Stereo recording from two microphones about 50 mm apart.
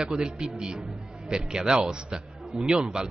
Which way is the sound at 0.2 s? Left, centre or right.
Centre.